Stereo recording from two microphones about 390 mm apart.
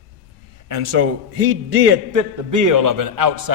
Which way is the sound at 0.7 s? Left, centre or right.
Right.